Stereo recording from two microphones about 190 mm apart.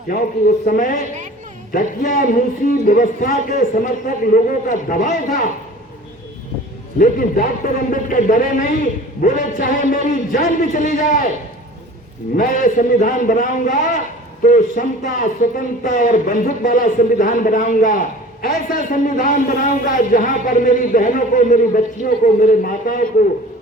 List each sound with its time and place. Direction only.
0.1 s speech: 45° left (ahead or behind)
7.0 s speech: 45° left (ahead or behind)
12.4 s speech: 45° left (ahead or behind)